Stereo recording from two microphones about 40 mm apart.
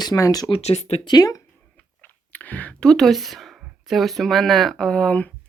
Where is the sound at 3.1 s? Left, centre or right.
Centre.